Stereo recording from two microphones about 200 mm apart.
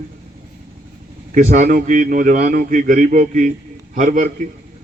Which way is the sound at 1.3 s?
40° right (ahead or behind).